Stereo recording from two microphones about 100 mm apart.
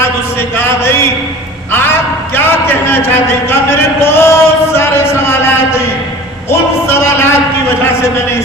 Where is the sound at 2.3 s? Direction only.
20° left (ahead or behind).